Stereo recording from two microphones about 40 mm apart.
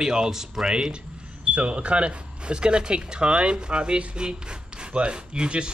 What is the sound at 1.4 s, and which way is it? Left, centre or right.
Speech, right.